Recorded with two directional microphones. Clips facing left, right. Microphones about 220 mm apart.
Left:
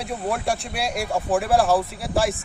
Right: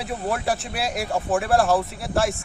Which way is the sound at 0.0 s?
Centre (ahead or behind).